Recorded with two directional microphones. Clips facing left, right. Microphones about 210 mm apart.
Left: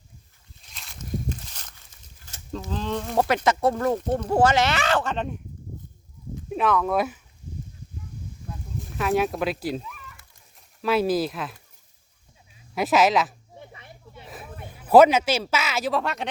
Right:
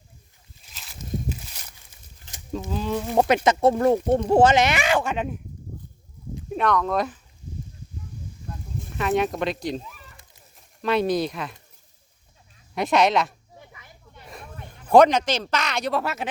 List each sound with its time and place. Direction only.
0.7 s walk: 5° right (ahead or behind)
2.3 s a sound: 15° right (ahead or behind)
3.2 s speech: 20° right (ahead or behind)
6.5 s speech: 5° left (ahead or behind)
9.0 s speech: centre (ahead or behind)
9.8 s a sound: 35° right (ahead or behind)
10.8 s speech: 5° left (ahead or behind)
12.7 s speech: 5° left (ahead or behind)
13.6 s snake: 30° left (ahead or behind)
14.1 s a sound: 5° left (ahead or behind)